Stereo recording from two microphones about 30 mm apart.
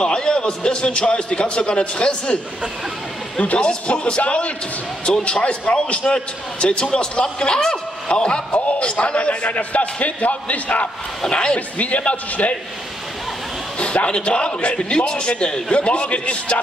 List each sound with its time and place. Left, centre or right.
0.0 s a man's voice: left
3.5 s a man's voice: left
5.2 s a man's voice: left
8.5 s a sound: left
8.8 s a man's voice: left
11.2 s speech: left
12.0 s a man's voice: left
13.7 s a man's voice: left